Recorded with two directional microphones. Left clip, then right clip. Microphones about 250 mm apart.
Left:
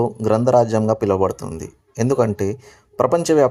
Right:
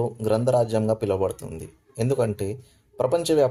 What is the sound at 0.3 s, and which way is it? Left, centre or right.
Speech, left.